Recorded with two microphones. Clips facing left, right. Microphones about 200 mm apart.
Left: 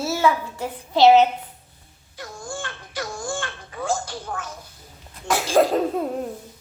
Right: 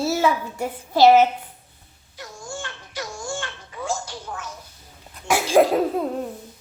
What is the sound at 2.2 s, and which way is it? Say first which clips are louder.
Baby cry: left 2 dB; 55° left (ahead or behind).